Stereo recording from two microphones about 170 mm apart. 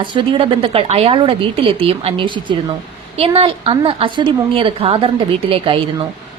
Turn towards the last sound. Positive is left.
turn(degrees=-30)  # may be behind; listen again after turning